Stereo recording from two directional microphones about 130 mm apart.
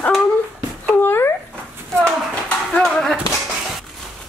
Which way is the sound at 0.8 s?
15° left (ahead or behind).